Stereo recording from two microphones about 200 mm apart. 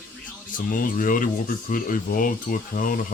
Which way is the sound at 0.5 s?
40° left (ahead or behind).